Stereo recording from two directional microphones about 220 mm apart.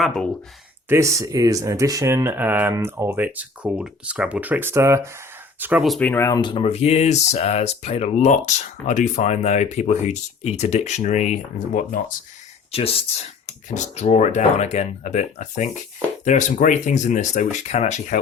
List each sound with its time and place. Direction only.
0.0 s speech: centre (ahead or behind)
0.9 s speech: 15° right (ahead or behind); by 12.0 s 35° left (ahead or behind)
12.7 s speech: 25° left (ahead or behind)